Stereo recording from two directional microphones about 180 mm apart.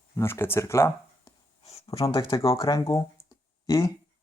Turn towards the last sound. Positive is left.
turn(degrees=20)  # may be behind; listen again after turning